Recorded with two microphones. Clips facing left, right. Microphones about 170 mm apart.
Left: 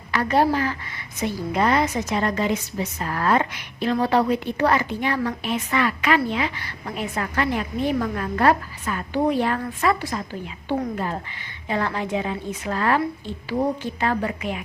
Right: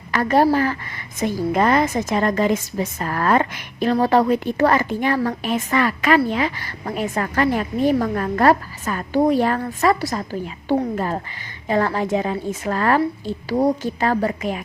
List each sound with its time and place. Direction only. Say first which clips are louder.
0.1 s a woman's voice: right 3 dB; 45° right (ahead or behind)